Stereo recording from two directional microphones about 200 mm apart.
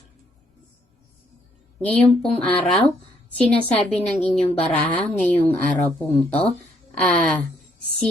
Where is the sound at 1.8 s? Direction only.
5° left (ahead or behind).